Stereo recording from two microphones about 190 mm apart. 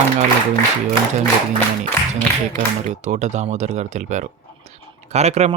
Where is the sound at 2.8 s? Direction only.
40° right (ahead or behind).